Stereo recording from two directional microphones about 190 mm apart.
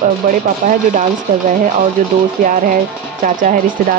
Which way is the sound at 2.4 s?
45° right (ahead or behind).